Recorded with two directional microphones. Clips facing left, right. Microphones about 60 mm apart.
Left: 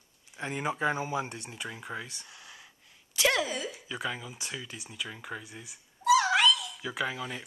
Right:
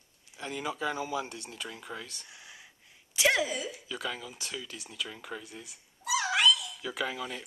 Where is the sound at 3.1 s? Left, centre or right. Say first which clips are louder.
Right 1 dB; centre.